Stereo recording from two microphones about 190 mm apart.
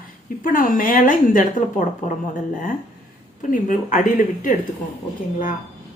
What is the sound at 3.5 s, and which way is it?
A woman's voice, 45° left (ahead or behind).